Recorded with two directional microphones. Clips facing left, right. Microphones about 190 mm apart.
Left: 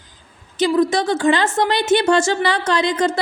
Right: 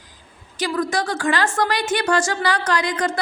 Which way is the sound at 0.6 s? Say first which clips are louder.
Left 6 dB; 20° left (ahead or behind).